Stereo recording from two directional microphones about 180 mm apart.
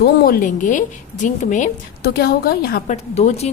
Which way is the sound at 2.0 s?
60° left (ahead or behind).